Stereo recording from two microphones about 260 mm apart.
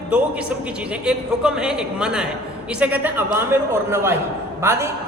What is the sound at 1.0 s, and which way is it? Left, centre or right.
A man's voice, centre.